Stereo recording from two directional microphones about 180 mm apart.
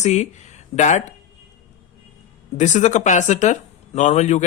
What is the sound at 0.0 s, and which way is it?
Speech, 40° left (ahead or behind).